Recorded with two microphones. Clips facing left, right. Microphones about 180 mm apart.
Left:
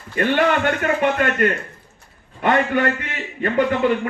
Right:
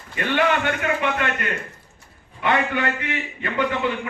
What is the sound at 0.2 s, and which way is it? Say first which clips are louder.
A man's voice: left 3 dB; 45° left (ahead or behind).